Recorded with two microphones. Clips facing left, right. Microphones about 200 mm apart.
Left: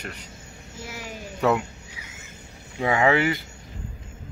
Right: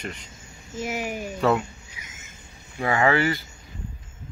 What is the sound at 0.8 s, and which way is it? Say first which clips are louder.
Speech: right 8 dB; 15° right (ahead or behind).